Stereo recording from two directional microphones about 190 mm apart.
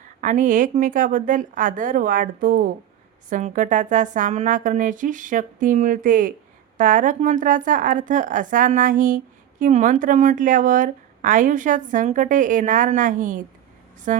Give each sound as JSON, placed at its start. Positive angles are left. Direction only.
{"t": 0.2, "sound": "speech", "side_deg": -45}